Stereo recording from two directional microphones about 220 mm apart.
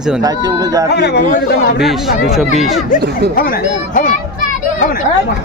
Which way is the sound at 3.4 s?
40° left (ahead or behind).